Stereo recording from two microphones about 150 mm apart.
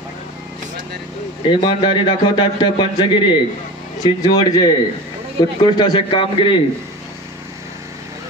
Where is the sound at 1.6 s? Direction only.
35° left (ahead or behind).